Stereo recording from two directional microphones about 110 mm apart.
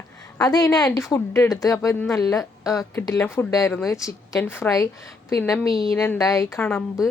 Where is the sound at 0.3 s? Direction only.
35° left (ahead or behind).